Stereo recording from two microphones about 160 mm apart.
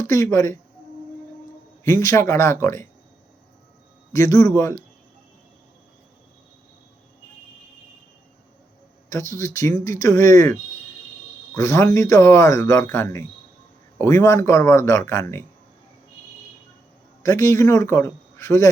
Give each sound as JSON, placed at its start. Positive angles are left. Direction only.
{"t": 0.0, "sound": "speech", "side_deg": 20}
{"t": 1.8, "sound": "speech", "side_deg": 20}
{"t": 4.1, "sound": "speech", "side_deg": 20}
{"t": 9.0, "sound": "speech", "side_deg": 20}
{"t": 17.2, "sound": "speech", "side_deg": 20}